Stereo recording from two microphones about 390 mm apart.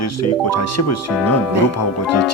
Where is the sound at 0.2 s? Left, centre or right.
Left.